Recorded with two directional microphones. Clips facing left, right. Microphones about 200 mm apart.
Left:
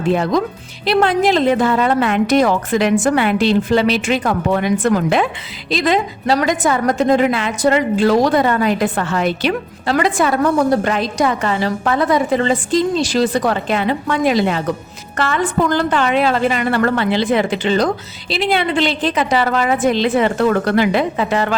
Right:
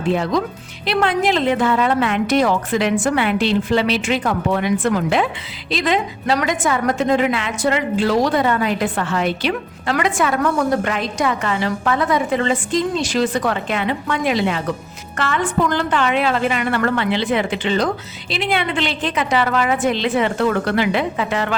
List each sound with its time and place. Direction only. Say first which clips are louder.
0.9 s a woman's voice: left 4 dB; 35° left (ahead or behind)